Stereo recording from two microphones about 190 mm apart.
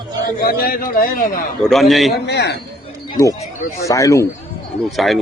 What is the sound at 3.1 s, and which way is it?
A man's voice, 20° left (ahead or behind).